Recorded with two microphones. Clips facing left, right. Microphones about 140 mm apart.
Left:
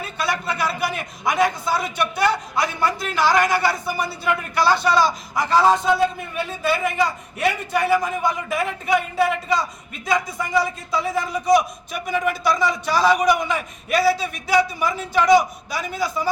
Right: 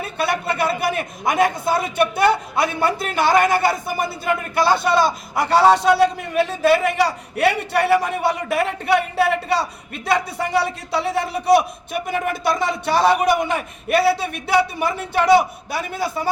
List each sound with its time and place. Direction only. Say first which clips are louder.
0.2 s a man's voice: right 3 dB; 55° right (ahead or behind)